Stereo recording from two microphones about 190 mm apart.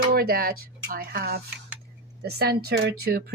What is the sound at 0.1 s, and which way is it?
Speech, 55° right (ahead or behind).